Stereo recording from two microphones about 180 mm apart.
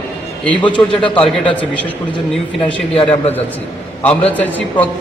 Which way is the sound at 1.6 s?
10° left (ahead or behind).